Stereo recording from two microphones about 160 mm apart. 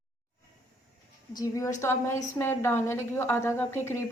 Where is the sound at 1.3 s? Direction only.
20° left (ahead or behind).